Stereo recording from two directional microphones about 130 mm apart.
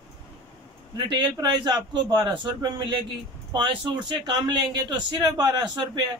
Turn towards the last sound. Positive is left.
turn(degrees=-30)  # may be behind; listen again after turning